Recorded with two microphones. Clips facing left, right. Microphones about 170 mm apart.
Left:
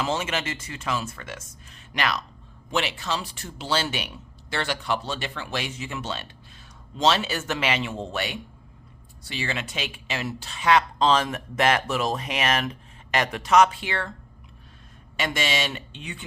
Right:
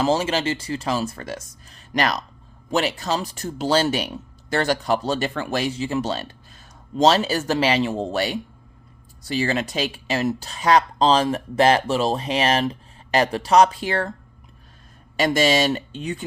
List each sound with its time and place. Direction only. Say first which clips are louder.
0.0 s speech: right 7 dB; 35° right (ahead or behind)
15.1 s speech: right 8 dB; 40° right (ahead or behind)